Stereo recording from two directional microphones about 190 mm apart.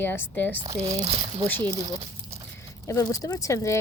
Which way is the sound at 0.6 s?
30° right (ahead or behind).